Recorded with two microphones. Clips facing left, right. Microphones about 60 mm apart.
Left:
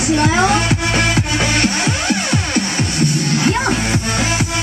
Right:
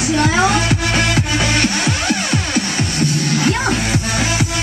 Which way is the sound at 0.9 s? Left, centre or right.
Centre.